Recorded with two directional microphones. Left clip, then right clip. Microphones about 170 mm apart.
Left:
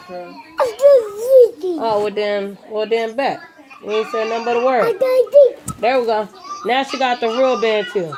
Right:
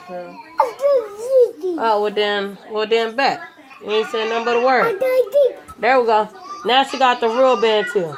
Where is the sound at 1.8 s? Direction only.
10° right (ahead or behind).